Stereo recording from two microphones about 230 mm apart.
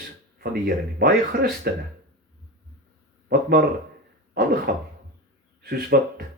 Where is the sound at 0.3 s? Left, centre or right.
Right.